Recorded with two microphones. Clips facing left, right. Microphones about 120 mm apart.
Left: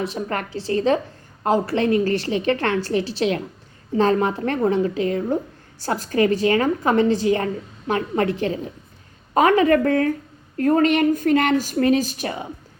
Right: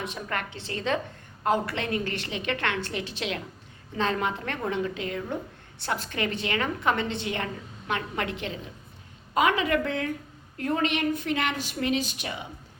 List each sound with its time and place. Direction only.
0.0 s a woman's voice: 35° left (ahead or behind)